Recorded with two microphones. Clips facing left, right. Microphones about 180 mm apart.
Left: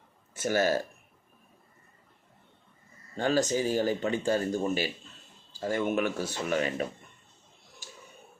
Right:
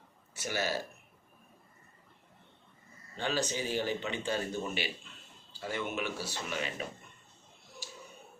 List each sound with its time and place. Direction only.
0.3 s speech: 50° left (ahead or behind)
3.2 s speech: 45° left (ahead or behind)